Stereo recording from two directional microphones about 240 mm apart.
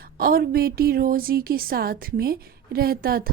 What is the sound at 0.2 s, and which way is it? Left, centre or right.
A woman's voice, right.